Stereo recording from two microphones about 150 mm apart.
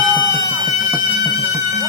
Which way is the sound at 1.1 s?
25° right (ahead or behind).